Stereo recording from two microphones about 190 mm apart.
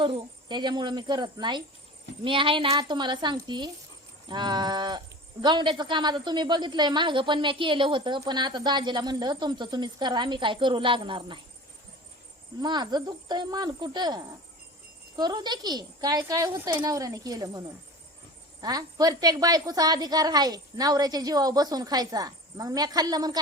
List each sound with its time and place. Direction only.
0.0 s speech: 25° right (ahead or behind)
12.6 s speech: 20° right (ahead or behind)
18.6 s speech: 20° right (ahead or behind)